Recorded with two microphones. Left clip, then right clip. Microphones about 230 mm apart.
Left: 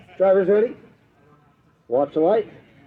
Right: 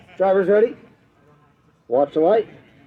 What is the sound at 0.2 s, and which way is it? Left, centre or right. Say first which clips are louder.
Speech: right 1 dB; right.